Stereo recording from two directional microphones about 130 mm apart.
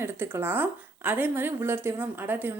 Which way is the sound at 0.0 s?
20° right (ahead or behind).